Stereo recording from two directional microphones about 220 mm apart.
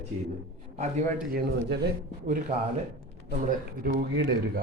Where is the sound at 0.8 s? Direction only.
30° right (ahead or behind).